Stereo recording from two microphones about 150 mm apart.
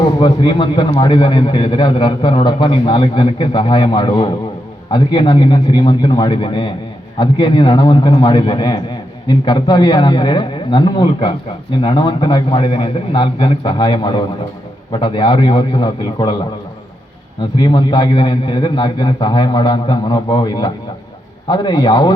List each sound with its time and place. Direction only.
0.2 s a man's voice: 30° left (ahead or behind)
17.6 s a man's voice: 30° left (ahead or behind)